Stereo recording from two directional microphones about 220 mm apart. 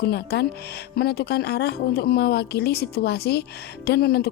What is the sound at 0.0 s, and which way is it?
Speech, 45° left (ahead or behind).